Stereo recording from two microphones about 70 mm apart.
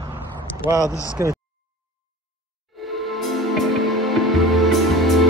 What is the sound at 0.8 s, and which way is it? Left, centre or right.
Speech, left.